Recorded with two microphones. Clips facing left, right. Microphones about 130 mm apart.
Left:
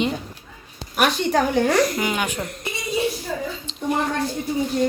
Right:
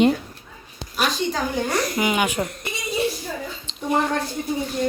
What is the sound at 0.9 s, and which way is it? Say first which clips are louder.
Speech: left 4 dB; 60° left (ahead or behind).